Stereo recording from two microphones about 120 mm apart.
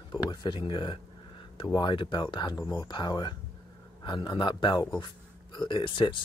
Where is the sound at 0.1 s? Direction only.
40° left (ahead or behind).